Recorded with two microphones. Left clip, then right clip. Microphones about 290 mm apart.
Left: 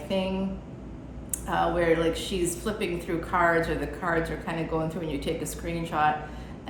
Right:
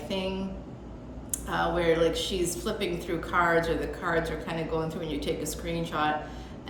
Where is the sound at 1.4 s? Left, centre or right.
Centre.